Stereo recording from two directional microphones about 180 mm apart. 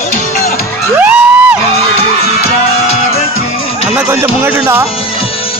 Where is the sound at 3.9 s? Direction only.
10° right (ahead or behind).